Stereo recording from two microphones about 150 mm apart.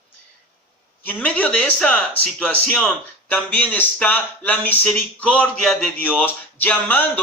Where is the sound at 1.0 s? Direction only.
10° left (ahead or behind).